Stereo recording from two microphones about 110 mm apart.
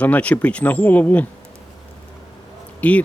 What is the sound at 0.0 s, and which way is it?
Speech, 15° left (ahead or behind).